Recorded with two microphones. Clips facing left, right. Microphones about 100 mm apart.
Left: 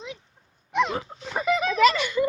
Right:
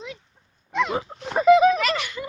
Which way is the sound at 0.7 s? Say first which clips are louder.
Even; 20° left (ahead or behind).